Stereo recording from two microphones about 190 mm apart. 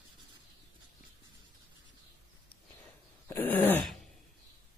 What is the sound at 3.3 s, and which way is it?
Throat clearing, 10° left (ahead or behind).